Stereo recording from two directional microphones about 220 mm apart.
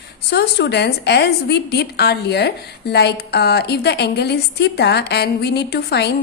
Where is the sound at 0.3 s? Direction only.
50° left (ahead or behind).